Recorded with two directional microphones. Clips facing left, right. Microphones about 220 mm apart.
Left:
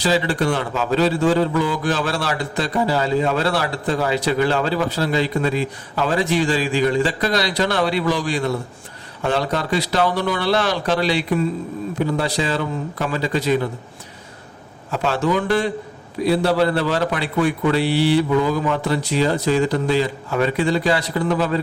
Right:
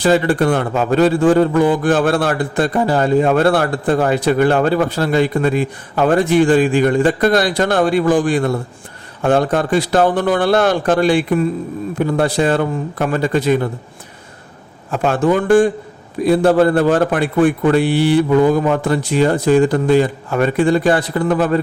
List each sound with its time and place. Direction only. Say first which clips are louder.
0.0 s a man's voice: right 6 dB; 55° right (ahead or behind)
14.8 s a man's voice: right 5 dB; 50° right (ahead or behind)